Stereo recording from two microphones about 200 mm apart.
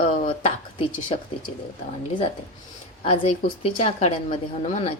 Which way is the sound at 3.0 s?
30° left (ahead or behind).